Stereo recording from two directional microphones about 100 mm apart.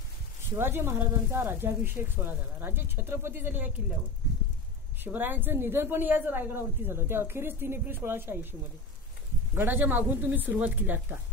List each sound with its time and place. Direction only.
0.6 s a woman's voice: 25° right (ahead or behind)
5.0 s a woman's voice: 20° right (ahead or behind)
9.6 s speech: 20° right (ahead or behind)